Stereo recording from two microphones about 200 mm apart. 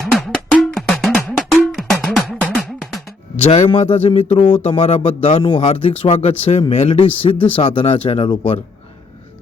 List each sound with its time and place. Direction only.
0.0 s cowbell: 5° left (ahead or behind)
3.3 s speech: 30° left (ahead or behind)